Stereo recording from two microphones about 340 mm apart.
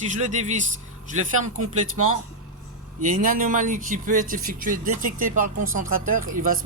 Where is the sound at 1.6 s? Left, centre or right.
Right.